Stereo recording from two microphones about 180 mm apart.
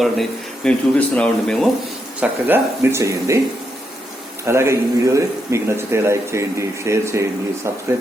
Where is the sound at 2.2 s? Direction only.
10° right (ahead or behind).